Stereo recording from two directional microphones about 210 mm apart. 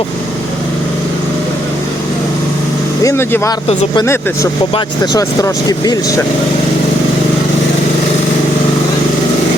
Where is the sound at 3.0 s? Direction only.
15° left (ahead or behind).